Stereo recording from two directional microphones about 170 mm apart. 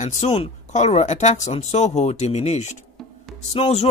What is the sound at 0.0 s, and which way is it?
Speech, 40° left (ahead or behind).